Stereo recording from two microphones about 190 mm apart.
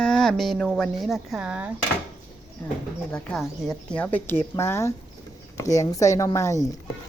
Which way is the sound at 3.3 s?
Centre (ahead or behind).